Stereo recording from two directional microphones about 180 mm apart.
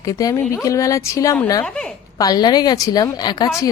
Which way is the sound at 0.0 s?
20° left (ahead or behind).